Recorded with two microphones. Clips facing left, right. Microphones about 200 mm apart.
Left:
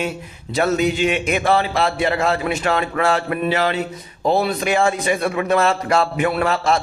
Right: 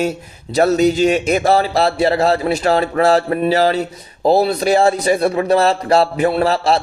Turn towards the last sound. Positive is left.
turn(degrees=-35)  # may be behind; listen again after turning